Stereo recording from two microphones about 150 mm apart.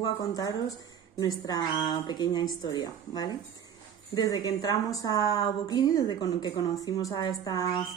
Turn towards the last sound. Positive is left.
turn(degrees=25)  # may be behind; listen again after turning